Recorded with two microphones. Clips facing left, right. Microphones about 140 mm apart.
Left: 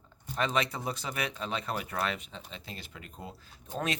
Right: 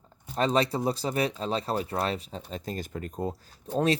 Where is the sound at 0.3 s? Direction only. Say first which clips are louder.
Right 6 dB; 35° right (ahead or behind).